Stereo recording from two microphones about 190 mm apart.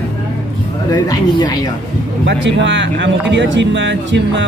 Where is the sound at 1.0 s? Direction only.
20° left (ahead or behind).